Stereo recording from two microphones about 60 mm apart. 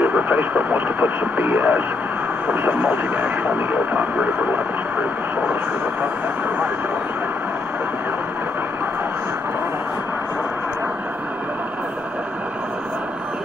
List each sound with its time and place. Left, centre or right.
0.0 s speech: right